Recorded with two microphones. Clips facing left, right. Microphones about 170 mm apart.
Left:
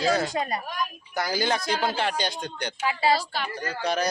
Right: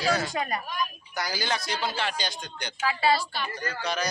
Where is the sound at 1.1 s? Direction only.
55° left (ahead or behind).